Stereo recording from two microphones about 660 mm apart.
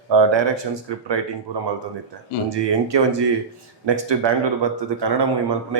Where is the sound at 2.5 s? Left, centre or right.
Right.